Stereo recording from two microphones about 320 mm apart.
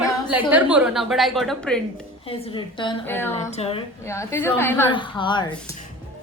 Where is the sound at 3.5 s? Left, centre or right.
Centre.